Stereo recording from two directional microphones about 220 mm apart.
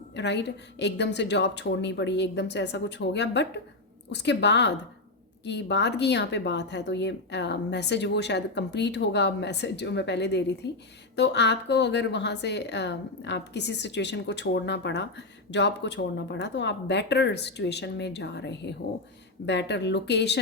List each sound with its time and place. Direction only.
0.2 s speech: 50° left (ahead or behind)